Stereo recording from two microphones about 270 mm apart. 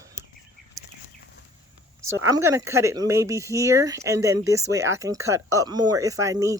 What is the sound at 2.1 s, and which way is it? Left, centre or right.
Speech, centre.